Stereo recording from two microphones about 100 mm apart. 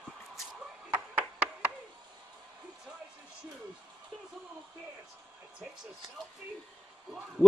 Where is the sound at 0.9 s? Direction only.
15° right (ahead or behind).